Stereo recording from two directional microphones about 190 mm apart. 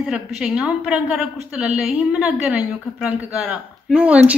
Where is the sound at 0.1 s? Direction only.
5° right (ahead or behind).